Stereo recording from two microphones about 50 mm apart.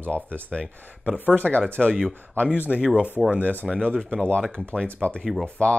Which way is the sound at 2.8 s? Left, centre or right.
Centre.